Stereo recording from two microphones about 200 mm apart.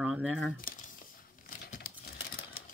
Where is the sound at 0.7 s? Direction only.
45° left (ahead or behind).